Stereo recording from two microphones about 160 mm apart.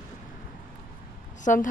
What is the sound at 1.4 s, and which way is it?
Speech, 55° left (ahead or behind).